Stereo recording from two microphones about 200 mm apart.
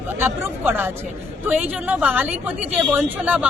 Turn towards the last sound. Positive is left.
turn(degrees=-5)  # may be behind; listen again after turning